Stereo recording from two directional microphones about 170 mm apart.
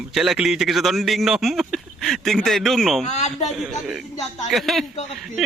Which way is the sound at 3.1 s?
40° left (ahead or behind).